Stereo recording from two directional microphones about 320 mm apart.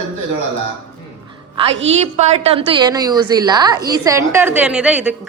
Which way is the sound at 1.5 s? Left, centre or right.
Centre.